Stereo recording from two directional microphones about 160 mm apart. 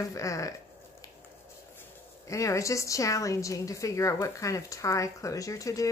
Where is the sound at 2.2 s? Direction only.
20° left (ahead or behind).